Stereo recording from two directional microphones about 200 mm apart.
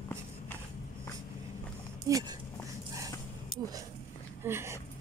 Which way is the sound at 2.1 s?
15° right (ahead or behind).